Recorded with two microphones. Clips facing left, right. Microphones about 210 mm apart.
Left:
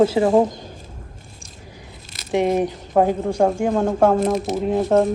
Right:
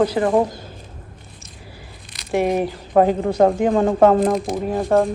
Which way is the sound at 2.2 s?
Centre (ahead or behind).